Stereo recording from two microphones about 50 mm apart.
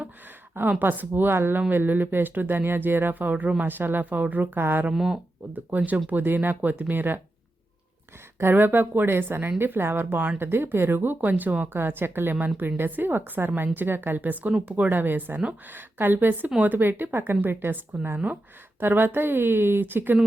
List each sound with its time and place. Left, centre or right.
0.8 s speech: right
4.9 s speech: centre
5.5 s speech: right
8.4 s speech: right